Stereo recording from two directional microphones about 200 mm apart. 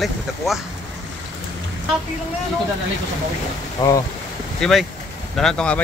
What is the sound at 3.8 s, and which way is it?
Speech, 20° left (ahead or behind).